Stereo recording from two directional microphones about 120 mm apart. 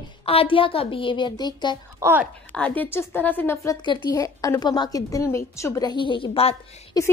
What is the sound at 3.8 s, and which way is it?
Speech, 40° left (ahead or behind).